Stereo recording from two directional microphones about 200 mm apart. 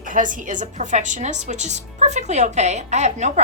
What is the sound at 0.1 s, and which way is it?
A woman's voice, 40° right (ahead or behind).